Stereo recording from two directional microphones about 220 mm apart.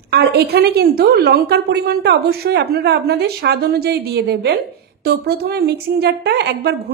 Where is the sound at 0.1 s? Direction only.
45° right (ahead or behind).